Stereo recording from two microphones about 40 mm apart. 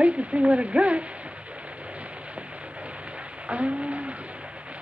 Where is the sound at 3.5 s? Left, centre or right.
Right.